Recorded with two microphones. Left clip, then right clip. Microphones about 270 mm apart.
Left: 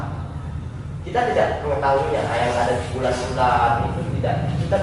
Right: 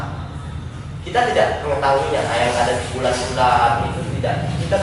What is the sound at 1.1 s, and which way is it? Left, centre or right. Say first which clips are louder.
A man's voice: right 3 dB; centre.